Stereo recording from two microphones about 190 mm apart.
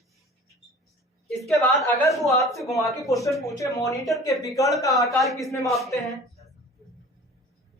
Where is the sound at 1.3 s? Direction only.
Centre (ahead or behind).